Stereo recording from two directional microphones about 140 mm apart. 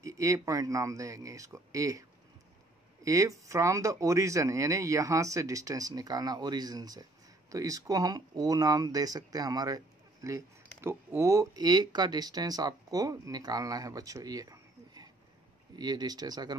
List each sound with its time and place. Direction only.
0.0 s speech: 20° right (ahead or behind)